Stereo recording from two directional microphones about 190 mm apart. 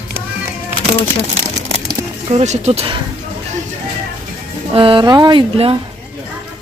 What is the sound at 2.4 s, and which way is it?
Speech, 35° right (ahead or behind).